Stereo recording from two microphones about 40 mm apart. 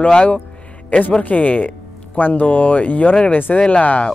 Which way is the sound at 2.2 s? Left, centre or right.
Left.